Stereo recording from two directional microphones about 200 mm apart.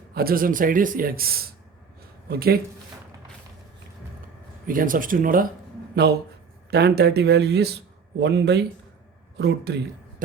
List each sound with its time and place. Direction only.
0.1 s a man's voice: 50° right (ahead or behind)
4.6 s a man's voice: 45° right (ahead or behind)